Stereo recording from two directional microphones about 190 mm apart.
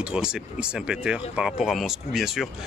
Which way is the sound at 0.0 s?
5° right (ahead or behind).